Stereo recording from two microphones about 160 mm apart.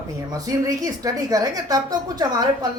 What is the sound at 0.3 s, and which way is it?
A woman's voice, 20° right (ahead or behind).